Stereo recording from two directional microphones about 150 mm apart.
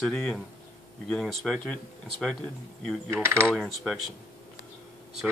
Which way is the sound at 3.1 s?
15° right (ahead or behind).